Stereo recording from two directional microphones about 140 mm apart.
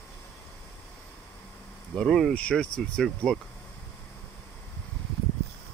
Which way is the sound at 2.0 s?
5° left (ahead or behind).